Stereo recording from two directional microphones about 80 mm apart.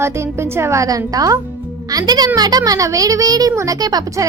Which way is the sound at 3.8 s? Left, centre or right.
Right.